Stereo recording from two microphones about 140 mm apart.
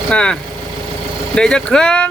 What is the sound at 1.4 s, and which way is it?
Speech, 5° left (ahead or behind).